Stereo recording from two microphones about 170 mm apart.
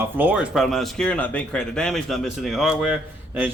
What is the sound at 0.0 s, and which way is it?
A man's voice, 10° right (ahead or behind).